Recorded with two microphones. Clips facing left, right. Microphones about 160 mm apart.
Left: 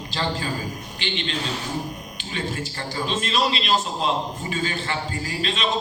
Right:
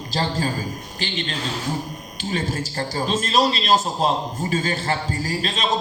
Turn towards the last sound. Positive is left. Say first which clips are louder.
# right 2 dB
turn(degrees=-40)  # may be behind; listen again after turning